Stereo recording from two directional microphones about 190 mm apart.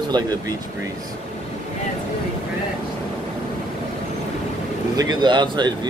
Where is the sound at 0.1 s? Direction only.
20° right (ahead or behind).